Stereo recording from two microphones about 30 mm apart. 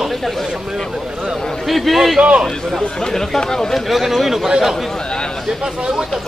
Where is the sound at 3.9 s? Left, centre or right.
Centre.